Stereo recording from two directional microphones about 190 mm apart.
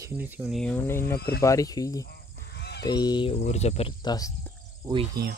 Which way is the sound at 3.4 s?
35° left (ahead or behind).